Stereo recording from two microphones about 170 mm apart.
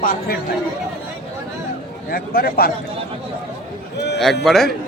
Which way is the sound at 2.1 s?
60° left (ahead or behind).